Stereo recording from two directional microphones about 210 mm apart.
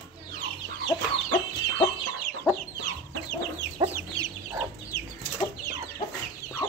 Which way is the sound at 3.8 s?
20° right (ahead or behind).